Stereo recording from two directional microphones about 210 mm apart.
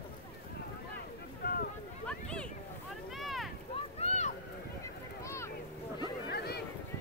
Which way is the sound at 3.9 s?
30° left (ahead or behind).